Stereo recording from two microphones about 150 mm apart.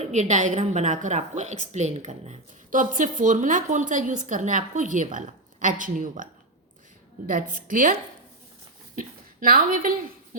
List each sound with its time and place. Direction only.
0.0 s a woman's voice: 50° right (ahead or behind)
7.3 s speech: 65° right (ahead or behind)
9.0 s a woman's voice: 75° right (ahead or behind)